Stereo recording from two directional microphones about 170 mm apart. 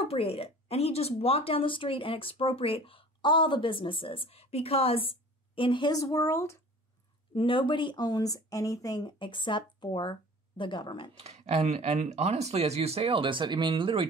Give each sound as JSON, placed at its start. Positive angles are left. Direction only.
{"t": 0.0, "sound": "speech", "side_deg": 35}
{"t": 7.3, "sound": "speech", "side_deg": 30}
{"t": 11.1, "sound": "speech", "side_deg": -40}